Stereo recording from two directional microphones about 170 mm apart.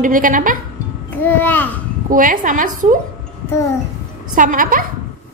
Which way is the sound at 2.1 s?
55° right (ahead or behind).